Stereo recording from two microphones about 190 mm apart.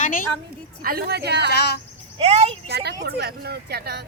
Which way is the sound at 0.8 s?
50° right (ahead or behind).